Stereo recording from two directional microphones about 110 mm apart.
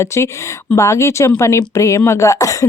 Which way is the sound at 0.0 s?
25° left (ahead or behind).